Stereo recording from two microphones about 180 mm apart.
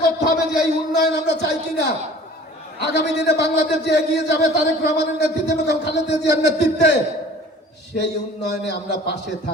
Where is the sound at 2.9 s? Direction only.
70° left (ahead or behind).